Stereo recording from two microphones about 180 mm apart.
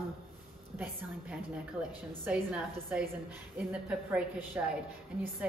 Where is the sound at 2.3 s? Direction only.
5° right (ahead or behind).